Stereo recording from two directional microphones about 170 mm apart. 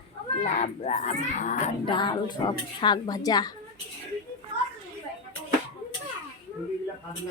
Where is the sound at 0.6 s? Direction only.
40° left (ahead or behind).